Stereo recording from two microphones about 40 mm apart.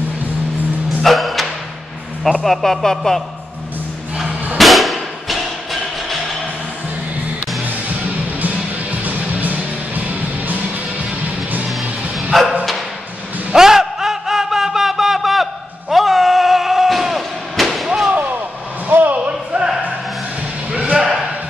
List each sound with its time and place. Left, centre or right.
1.0 s music: centre
2.4 s speech: centre
4.6 s music: centre
9.0 s music: right
12.3 s bow-wow: centre
13.5 s a sound: centre
18.9 s a sound: right
19.1 s music: right